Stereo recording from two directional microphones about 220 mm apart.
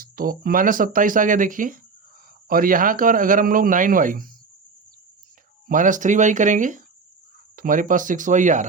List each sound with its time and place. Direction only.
0.0 s speech: 40° right (ahead or behind)
5.6 s speech: 35° right (ahead or behind)